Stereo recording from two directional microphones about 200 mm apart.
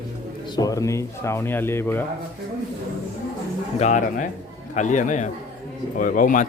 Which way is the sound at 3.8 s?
40° left (ahead or behind).